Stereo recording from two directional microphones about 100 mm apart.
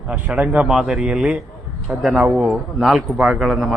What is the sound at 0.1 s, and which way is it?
A man's voice, 10° right (ahead or behind).